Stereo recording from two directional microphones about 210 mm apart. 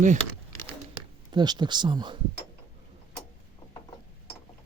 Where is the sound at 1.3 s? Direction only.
20° right (ahead or behind).